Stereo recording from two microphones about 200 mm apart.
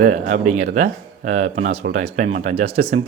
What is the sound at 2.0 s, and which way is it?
Speech, 35° right (ahead or behind).